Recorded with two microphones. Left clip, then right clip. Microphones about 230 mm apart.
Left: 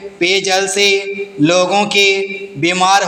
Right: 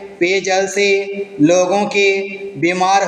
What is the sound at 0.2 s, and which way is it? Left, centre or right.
Mantra, left.